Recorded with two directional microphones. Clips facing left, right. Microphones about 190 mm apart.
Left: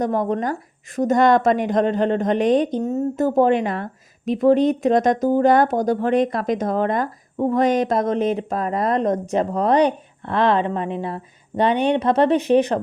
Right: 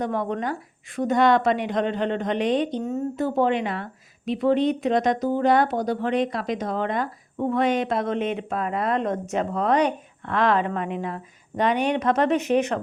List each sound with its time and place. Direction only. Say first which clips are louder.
0.0 s speech: left 5 dB; 40° left (ahead or behind)